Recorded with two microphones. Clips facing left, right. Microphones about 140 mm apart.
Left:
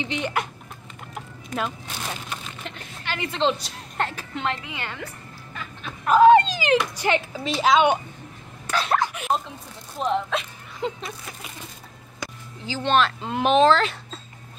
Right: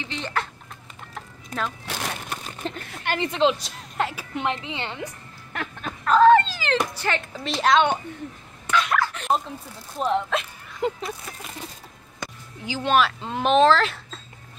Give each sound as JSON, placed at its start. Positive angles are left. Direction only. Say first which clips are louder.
{"t": 0.0, "sound": "a woman's voice", "louder": "left 3 dB", "side_deg": 15}
{"t": 1.1, "sound": "a sound", "louder": "left 2 dB", "side_deg": 10}
{"t": 2.2, "sound": "a sound", "louder": "right 3 dB", "side_deg": -45}
{"t": 3.3, "sound": "a woman's voice", "louder": "right 1 dB", "side_deg": -5}
{"t": 5.5, "sound": "music", "louder": "right 6 dB", "side_deg": -70}
{"t": 6.0, "sound": "dog", "louder": "left 1 dB", "side_deg": 15}
{"t": 6.9, "sound": "a woman's voice", "louder": "left 4 dB", "side_deg": 15}
{"t": 8.6, "sound": "speech", "louder": "right 1 dB", "side_deg": 35}
{"t": 9.9, "sound": "speech", "louder": "right 1 dB", "side_deg": 0}
{"t": 12.6, "sound": "speech", "louder": "even", "side_deg": -10}